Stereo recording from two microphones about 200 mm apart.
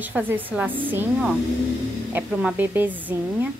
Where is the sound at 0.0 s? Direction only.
10° right (ahead or behind).